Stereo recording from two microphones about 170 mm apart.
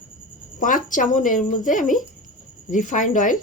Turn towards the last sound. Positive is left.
turn(degrees=50)  # may be behind; listen again after turning